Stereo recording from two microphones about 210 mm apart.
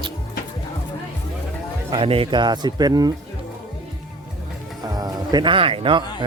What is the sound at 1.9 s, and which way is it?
Speech, 25° right (ahead or behind).